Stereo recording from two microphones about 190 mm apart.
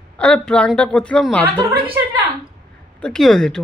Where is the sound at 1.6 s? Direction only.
25° right (ahead or behind).